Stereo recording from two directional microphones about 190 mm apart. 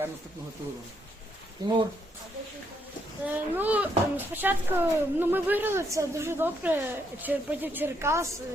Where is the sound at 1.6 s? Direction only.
20° right (ahead or behind).